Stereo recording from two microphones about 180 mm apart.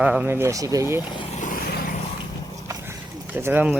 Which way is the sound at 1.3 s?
50° left (ahead or behind).